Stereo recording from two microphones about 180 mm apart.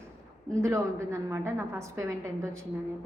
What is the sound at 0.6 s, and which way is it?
A woman's voice, 15° right (ahead or behind).